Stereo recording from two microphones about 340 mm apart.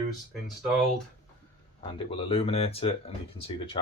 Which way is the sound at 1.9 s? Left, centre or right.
Centre.